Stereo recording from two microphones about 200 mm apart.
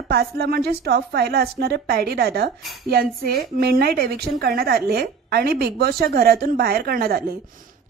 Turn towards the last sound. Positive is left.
turn(degrees=-50)  # may be behind; listen again after turning